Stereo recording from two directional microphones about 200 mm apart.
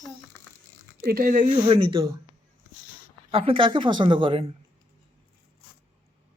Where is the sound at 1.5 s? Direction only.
25° right (ahead or behind).